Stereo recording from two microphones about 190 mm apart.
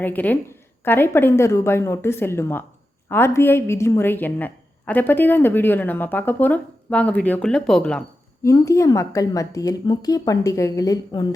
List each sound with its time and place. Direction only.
0.0 s a woman's voice: 10° left (ahead or behind)
8.4 s a woman's voice: 15° left (ahead or behind)